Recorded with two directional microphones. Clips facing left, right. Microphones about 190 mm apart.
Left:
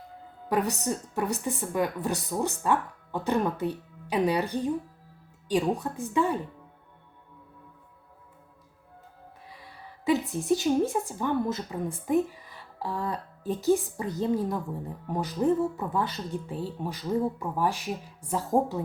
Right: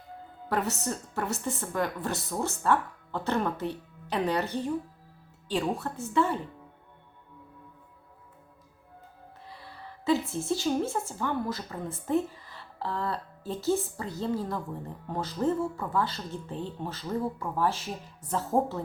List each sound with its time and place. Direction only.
0.4 s a woman's voice: 15° left (ahead or behind)
9.5 s a woman's voice: 15° left (ahead or behind)